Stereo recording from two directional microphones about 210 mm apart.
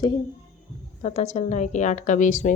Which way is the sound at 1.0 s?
30° left (ahead or behind).